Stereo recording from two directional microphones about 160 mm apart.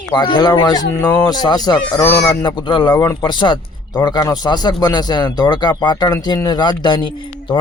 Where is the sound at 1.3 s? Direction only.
25° left (ahead or behind).